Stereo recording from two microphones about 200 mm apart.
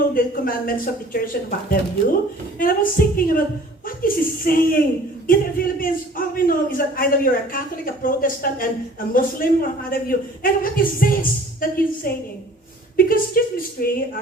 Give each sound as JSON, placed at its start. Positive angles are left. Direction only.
{"t": 0.1, "sound": "a man's voice", "side_deg": 45}